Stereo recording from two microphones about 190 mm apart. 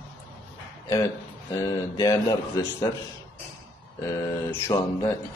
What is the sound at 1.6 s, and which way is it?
A man's voice, 20° left (ahead or behind).